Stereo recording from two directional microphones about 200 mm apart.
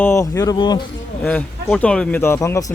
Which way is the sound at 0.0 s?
15° left (ahead or behind).